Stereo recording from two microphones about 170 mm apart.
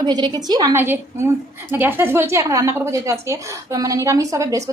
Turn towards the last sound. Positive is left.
turn(degrees=-20)  # may be behind; listen again after turning